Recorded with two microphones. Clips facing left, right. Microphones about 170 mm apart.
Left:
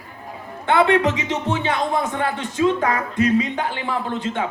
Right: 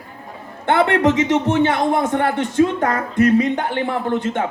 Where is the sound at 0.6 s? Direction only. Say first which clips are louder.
Right 1 dB; 55° right (ahead or behind).